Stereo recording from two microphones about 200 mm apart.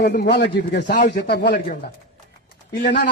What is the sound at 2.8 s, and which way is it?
Speech, 40° left (ahead or behind).